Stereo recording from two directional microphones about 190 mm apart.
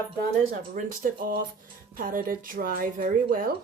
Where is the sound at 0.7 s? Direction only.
45° right (ahead or behind).